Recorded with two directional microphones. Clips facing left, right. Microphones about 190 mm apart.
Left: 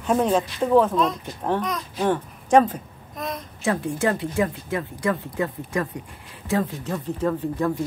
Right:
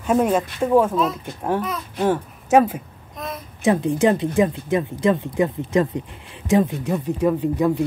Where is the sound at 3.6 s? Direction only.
20° right (ahead or behind).